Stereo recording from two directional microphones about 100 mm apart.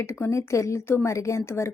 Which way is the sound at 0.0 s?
25° left (ahead or behind).